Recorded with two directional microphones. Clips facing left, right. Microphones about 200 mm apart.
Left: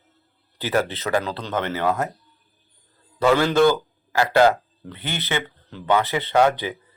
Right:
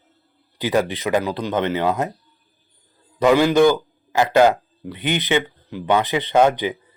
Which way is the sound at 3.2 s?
15° right (ahead or behind).